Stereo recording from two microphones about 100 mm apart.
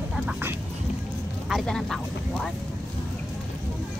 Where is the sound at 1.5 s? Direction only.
5° left (ahead or behind).